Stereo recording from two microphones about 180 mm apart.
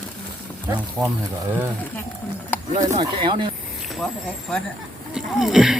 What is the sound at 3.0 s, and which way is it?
Speech, 25° right (ahead or behind).